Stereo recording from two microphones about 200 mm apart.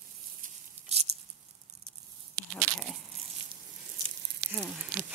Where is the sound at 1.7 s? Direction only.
55° right (ahead or behind).